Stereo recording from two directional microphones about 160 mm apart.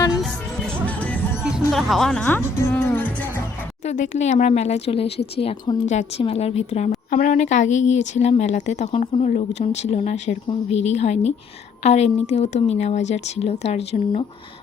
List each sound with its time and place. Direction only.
0.9 s music: 10° left (ahead or behind)
3.8 s speech: 50° left (ahead or behind)